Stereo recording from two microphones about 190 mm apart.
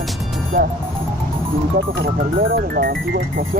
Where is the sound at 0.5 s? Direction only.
55° right (ahead or behind).